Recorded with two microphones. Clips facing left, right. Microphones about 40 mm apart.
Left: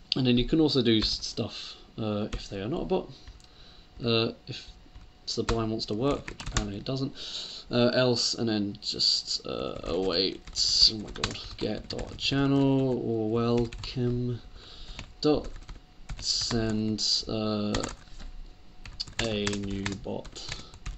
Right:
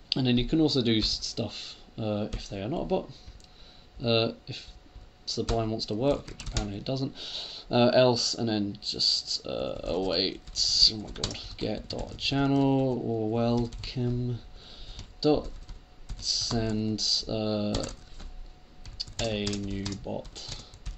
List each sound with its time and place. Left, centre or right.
0.1 s speech: centre
6.2 s speech: left
6.7 s speech: centre
11.1 s speech: left
11.3 s speech: centre
13.0 s speech: centre
13.3 s speech: centre
15.4 s computer keyboard: left
16.2 s speech: centre
17.6 s speech: left
19.2 s speech: left
20.4 s speech: centre